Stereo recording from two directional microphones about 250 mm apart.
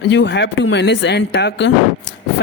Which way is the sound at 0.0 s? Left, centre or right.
Left.